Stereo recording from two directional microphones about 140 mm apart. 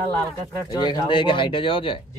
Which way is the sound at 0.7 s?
30° left (ahead or behind).